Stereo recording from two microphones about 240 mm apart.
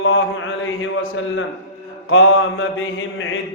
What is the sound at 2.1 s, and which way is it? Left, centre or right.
Mantra, left.